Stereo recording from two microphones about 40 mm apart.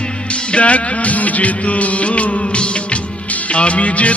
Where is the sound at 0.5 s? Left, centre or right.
Left.